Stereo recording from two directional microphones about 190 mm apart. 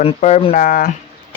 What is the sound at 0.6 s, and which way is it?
Speech, 45° left (ahead or behind).